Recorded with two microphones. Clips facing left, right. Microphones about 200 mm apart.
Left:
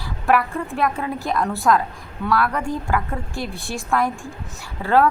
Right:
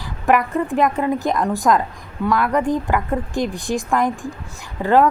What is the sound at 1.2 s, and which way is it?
A woman's voice, 15° right (ahead or behind).